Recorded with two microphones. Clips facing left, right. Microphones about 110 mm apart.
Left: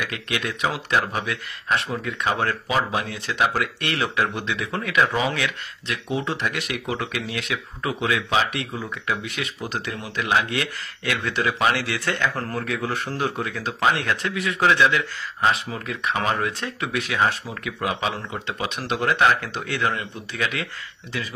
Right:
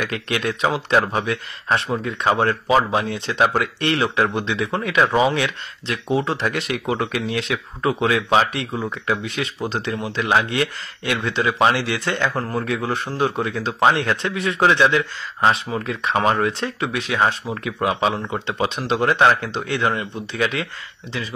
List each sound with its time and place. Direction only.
0.0 s speech: 35° right (ahead or behind)